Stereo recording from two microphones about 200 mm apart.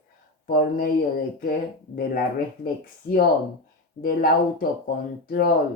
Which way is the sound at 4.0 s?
45° left (ahead or behind).